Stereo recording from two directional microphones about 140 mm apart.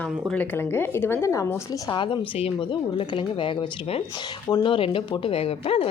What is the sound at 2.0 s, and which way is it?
Speech, 35° left (ahead or behind).